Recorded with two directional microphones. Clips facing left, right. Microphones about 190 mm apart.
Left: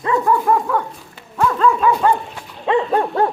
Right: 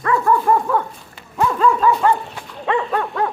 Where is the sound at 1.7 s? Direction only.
10° left (ahead or behind).